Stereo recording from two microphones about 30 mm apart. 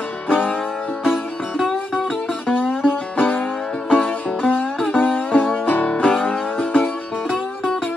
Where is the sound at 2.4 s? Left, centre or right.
Left.